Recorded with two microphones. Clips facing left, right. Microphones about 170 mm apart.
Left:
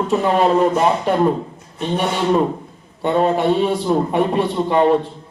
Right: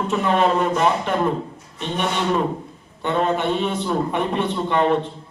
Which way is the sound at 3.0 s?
35° left (ahead or behind).